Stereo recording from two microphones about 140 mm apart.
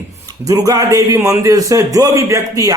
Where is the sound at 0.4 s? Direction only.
25° right (ahead or behind).